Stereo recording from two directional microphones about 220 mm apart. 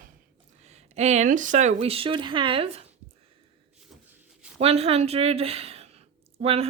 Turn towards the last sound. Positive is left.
turn(degrees=-25)  # may be behind; listen again after turning